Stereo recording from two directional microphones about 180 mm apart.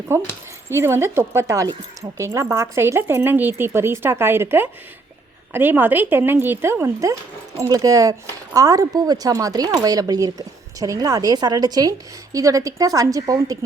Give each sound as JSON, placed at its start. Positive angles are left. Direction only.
{"t": 0.1, "sound": "speech", "side_deg": -15}